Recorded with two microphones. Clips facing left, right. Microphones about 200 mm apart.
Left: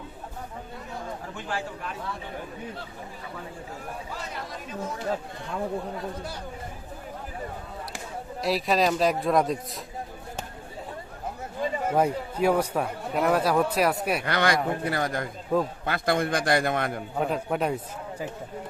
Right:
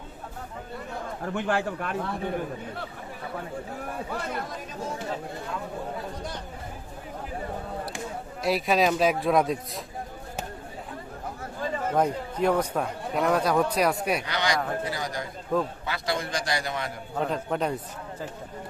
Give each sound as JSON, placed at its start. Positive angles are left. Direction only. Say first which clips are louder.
{"t": 1.2, "sound": "a man's voice", "louder": "right 11 dB", "side_deg": -60}
{"t": 7.9, "sound": "a man's voice", "louder": "right 1 dB", "side_deg": 0}
{"t": 11.6, "sound": "speech", "louder": "left 1 dB", "side_deg": 10}
{"t": 14.3, "sound": "a man's voice", "louder": "left 3 dB", "side_deg": 55}
{"t": 15.5, "sound": "speech", "louder": "left 1 dB", "side_deg": 10}
{"t": 15.9, "sound": "a man's voice", "louder": "left 5 dB", "side_deg": 55}
{"t": 17.2, "sound": "speech", "louder": "even", "side_deg": 5}